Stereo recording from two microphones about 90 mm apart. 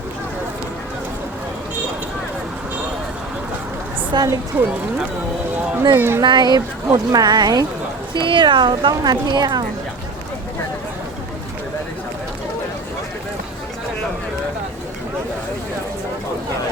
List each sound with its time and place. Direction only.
4.1 s a woman's voice: 55° right (ahead or behind)
4.5 s speech: 20° right (ahead or behind)
6.0 s speech: 30° right (ahead or behind)
6.2 s a woman's voice: 55° right (ahead or behind)
8.1 s speech: 65° right (ahead or behind)